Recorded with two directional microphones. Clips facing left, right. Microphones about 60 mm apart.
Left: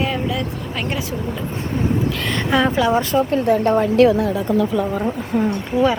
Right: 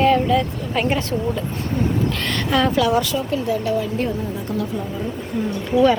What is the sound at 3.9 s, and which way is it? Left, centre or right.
Speech, left.